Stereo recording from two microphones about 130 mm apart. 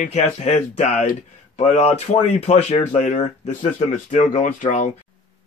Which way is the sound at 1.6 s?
60° left (ahead or behind).